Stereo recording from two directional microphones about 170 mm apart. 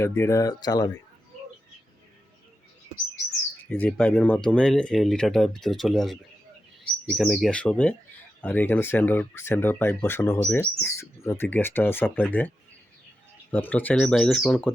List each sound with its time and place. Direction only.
0.0 s speech: 15° left (ahead or behind)
3.7 s speech: 10° left (ahead or behind)
13.5 s speech: 10° left (ahead or behind)